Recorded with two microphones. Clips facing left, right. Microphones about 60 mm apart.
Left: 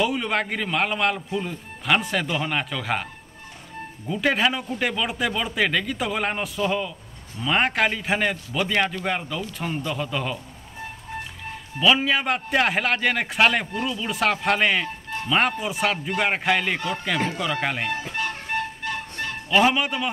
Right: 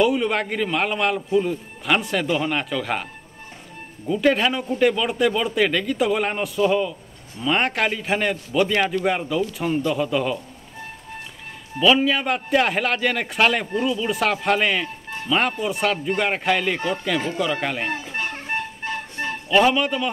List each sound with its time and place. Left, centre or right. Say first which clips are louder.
0.0 s speech: right 4 dB; centre
4.1 s speech: right 3 dB; centre
11.8 s speech: right 2 dB; centre
18.8 s music: right 1 dB; right
19.5 s speech: right 2 dB; centre